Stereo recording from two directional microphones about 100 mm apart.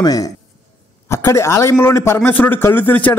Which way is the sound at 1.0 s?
25° left (ahead or behind).